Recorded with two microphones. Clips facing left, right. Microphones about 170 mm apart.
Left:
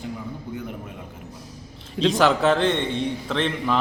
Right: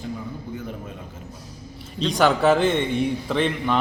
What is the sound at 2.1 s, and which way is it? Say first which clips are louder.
A man's voice: right 3 dB; centre (ahead or behind).